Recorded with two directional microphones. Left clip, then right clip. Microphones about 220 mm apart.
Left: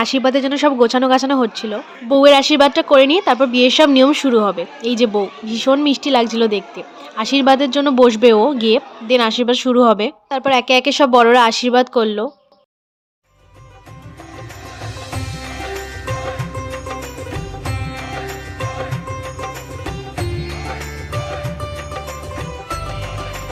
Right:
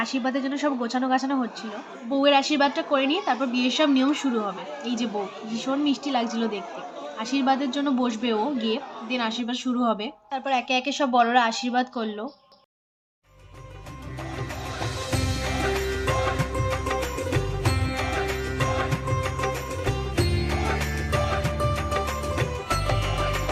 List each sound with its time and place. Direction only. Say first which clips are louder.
0.0 s speech: left 11 dB; 50° left (ahead or behind)
16.6 s music: even; centre (ahead or behind)